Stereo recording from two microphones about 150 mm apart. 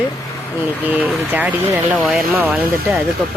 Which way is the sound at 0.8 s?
10° right (ahead or behind).